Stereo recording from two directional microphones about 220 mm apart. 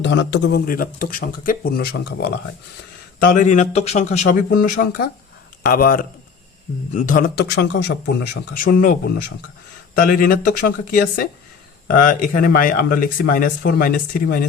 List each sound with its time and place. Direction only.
0.0 s speech: 55° left (ahead or behind)
3.2 s speech: 35° left (ahead or behind); by 7.9 s 50° left (ahead or behind)
8.5 s speech: 40° left (ahead or behind)